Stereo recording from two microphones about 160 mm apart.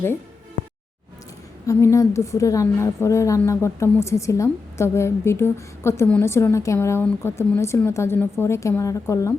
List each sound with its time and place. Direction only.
1.6 s a woman's voice: 20° left (ahead or behind)